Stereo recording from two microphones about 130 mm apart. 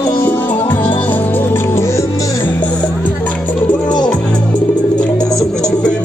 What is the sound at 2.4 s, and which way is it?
Music, 10° left (ahead or behind).